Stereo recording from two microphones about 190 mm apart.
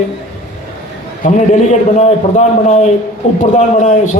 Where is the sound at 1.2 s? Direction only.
40° left (ahead or behind).